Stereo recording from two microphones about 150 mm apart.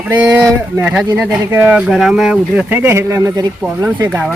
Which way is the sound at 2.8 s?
15° right (ahead or behind).